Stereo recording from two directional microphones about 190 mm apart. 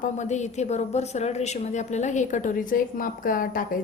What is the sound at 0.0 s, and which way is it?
A woman's voice, 40° left (ahead or behind).